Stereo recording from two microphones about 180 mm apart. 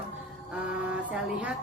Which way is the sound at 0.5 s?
5° right (ahead or behind).